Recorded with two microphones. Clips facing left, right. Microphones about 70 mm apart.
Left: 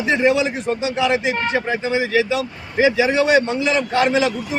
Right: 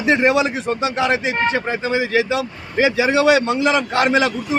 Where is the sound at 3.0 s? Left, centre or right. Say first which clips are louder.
Right 4 dB; right.